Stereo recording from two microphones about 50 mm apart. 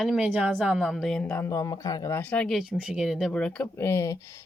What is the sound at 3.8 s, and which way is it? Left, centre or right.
Speech, left.